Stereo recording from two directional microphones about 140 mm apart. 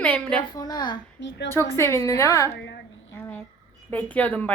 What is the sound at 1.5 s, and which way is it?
A child's voice, 20° left (ahead or behind).